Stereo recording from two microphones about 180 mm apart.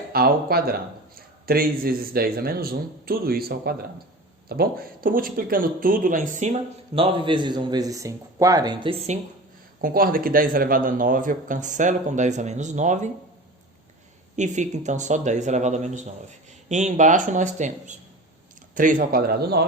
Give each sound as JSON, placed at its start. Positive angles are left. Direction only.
{"t": 0.1, "sound": "speech", "side_deg": -55}
{"t": 6.9, "sound": "a man's voice", "side_deg": -30}
{"t": 9.8, "sound": "speech", "side_deg": -55}
{"t": 14.3, "sound": "speech", "side_deg": -40}